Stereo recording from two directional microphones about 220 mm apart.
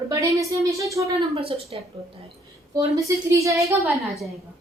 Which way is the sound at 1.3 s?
25° right (ahead or behind).